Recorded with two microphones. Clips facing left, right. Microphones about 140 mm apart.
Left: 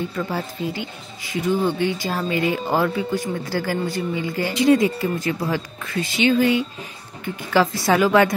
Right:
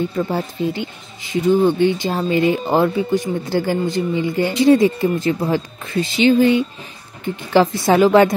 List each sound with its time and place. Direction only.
0.1 s speech: 25° right (ahead or behind)